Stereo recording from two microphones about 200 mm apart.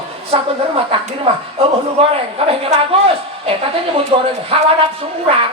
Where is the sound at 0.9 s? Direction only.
30° right (ahead or behind).